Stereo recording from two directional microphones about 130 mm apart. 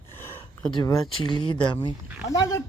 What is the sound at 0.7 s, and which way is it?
Speech, 40° left (ahead or behind).